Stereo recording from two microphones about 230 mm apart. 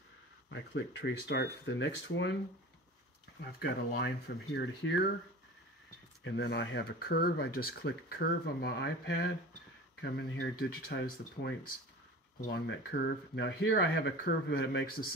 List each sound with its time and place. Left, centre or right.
0.5 s speech: left
3.5 s speech: left
6.2 s speech: left